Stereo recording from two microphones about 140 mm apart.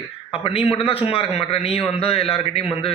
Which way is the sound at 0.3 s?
40° left (ahead or behind).